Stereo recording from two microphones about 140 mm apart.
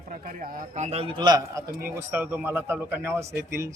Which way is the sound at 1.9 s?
15° right (ahead or behind).